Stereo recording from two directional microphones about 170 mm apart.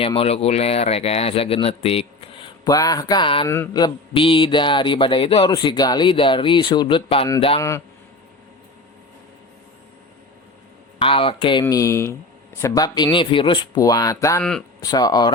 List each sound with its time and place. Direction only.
0.0 s speech: 35° left (ahead or behind)
3.5 s mantra: 20° left (ahead or behind)
7.3 s speech: 35° left (ahead or behind)
11.0 s speech: 30° left (ahead or behind)
11.6 s speech: 20° left (ahead or behind)
12.5 s mantra: 20° left (ahead or behind)